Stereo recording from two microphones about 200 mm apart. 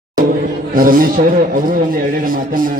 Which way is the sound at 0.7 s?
45° right (ahead or behind).